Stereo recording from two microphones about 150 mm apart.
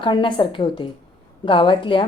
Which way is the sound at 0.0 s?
35° left (ahead or behind).